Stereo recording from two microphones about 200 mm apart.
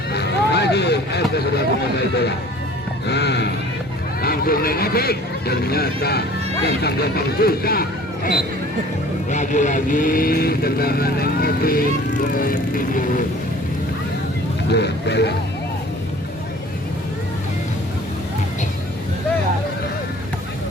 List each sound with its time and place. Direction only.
0.1 s vehicle: 55° left (ahead or behind)
3.1 s speech: 55° left (ahead or behind); by 13.2 s 40° left (ahead or behind)
14.7 s speech: 55° left (ahead or behind)